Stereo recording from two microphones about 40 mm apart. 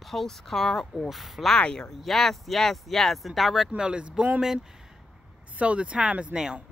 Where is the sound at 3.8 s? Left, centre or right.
Right.